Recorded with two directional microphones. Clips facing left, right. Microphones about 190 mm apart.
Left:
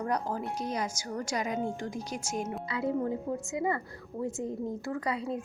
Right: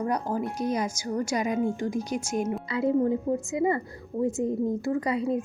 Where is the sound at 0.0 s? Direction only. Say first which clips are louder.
Right 4 dB; 15° right (ahead or behind).